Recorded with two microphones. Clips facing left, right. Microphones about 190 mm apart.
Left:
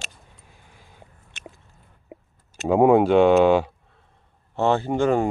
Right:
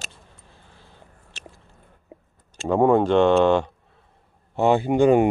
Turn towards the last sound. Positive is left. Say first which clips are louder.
# right 4 dB
turn(degrees=-15)  # may be behind; listen again after turning